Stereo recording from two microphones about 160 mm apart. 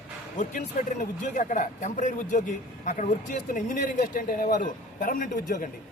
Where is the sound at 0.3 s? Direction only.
50° left (ahead or behind).